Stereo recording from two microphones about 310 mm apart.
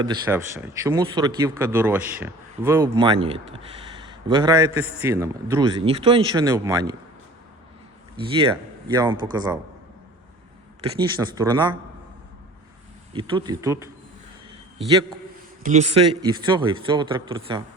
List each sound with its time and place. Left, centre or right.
0.0 s speech: centre
8.9 s speech: centre
10.9 s speech: centre
13.1 s speech: centre
15.6 s speech: right